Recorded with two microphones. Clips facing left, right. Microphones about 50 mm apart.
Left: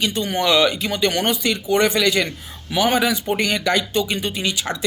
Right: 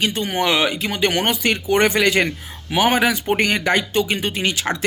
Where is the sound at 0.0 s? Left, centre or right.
Right.